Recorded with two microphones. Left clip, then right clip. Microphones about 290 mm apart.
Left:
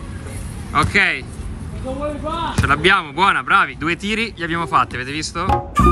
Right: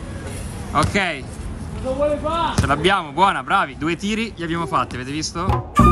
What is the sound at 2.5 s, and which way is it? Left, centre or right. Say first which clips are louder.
Speech: left 6 dB; centre.